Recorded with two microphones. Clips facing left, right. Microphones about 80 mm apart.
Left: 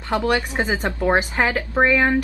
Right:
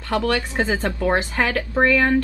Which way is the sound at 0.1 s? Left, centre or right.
Centre.